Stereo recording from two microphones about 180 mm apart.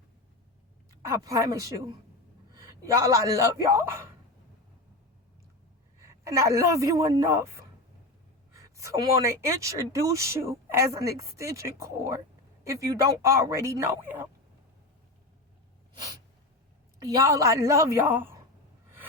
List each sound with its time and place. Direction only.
1.0 s a man's voice: 15° right (ahead or behind)
6.0 s speech: 15° right (ahead or behind)
17.0 s speech: 20° right (ahead or behind)